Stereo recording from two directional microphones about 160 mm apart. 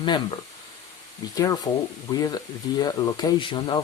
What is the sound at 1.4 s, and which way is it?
Speech, 20° left (ahead or behind).